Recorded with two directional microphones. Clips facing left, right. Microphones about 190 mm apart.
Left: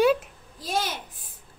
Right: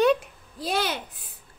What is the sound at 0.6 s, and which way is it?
Speech, 65° right (ahead or behind).